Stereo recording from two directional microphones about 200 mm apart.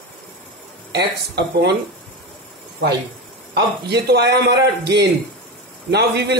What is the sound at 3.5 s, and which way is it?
A man's voice, 60° right (ahead or behind).